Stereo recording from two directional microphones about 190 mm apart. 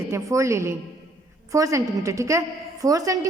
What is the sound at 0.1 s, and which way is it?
A woman's voice, 15° right (ahead or behind).